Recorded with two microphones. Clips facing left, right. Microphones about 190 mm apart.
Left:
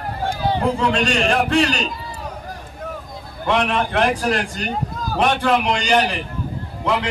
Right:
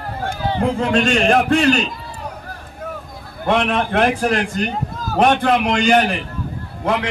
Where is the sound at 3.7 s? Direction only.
50° right (ahead or behind).